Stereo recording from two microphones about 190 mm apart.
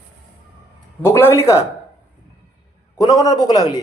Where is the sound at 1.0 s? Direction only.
15° left (ahead or behind).